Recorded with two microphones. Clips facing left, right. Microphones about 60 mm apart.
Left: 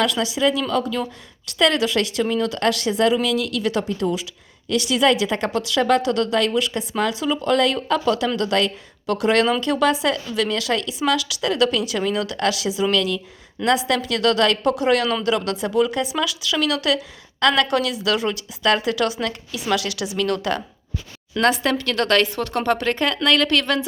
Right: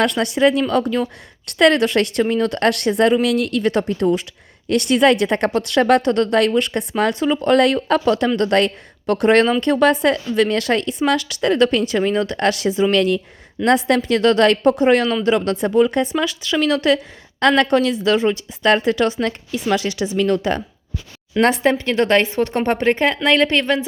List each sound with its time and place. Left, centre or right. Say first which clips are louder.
0.0 s a woman's voice: right 4 dB; right